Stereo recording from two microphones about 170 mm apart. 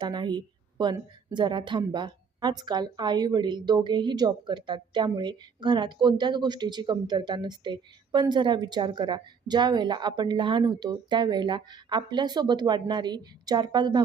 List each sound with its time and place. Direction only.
0.0 s a woman's voice: 25° right (ahead or behind)